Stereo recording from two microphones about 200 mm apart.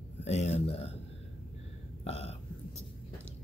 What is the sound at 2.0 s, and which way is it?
Burping, 30° left (ahead or behind).